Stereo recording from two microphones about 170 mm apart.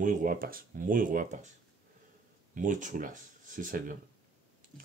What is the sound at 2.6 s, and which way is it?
Speech, 50° right (ahead or behind).